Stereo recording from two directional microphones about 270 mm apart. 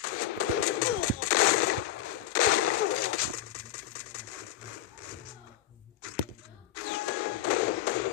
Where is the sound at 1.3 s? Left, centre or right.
Left.